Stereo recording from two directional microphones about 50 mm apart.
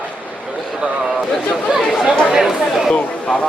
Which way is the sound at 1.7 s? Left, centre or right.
Centre.